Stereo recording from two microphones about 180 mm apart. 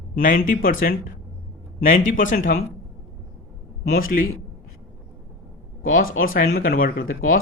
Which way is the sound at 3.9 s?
50° left (ahead or behind).